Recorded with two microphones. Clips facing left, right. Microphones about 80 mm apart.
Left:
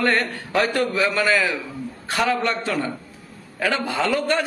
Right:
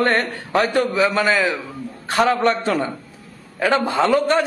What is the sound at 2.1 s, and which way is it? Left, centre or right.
A man's voice, right.